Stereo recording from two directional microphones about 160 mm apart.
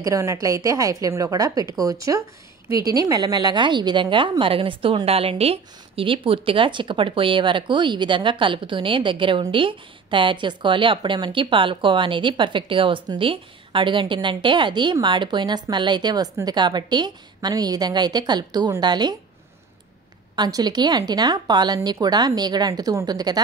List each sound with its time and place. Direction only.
0.0 s a woman's voice: 20° right (ahead or behind)
20.3 s a woman's voice: 25° right (ahead or behind)